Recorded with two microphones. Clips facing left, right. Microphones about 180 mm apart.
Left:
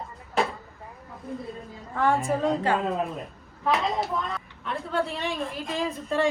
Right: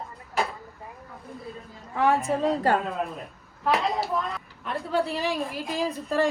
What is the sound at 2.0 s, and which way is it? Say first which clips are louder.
Speech: right 1 dB; centre (ahead or behind).